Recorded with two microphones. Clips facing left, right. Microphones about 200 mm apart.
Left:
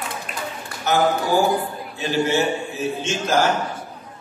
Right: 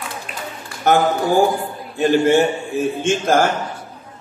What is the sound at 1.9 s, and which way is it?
A man's voice, 55° right (ahead or behind).